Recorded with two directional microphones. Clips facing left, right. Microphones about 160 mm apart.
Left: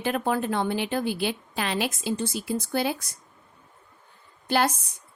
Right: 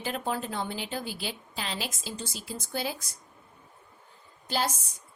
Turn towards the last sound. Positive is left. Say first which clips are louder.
# left 6 dB
turn(degrees=60)  # may be behind; listen again after turning